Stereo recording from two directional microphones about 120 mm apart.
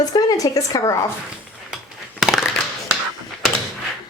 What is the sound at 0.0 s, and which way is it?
Speech, 35° left (ahead or behind).